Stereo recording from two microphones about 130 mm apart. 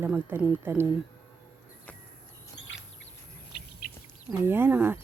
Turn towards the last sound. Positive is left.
turn(degrees=-15)  # may be behind; listen again after turning